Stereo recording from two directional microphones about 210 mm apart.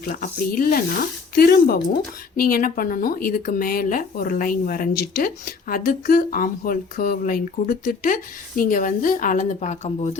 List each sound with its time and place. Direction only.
0.1 s speech: 40° left (ahead or behind)